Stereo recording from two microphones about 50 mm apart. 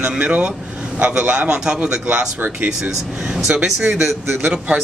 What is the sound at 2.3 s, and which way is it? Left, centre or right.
Speech, right.